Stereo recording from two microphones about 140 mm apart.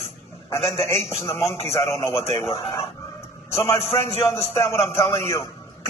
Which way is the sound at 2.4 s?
45° left (ahead or behind).